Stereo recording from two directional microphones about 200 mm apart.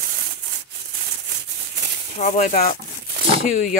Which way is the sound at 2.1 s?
40° left (ahead or behind).